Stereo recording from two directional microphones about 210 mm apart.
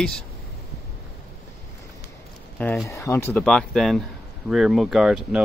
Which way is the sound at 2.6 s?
Centre (ahead or behind).